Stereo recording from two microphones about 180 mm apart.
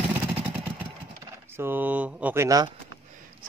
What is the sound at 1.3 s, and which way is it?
Speech, 15° right (ahead or behind).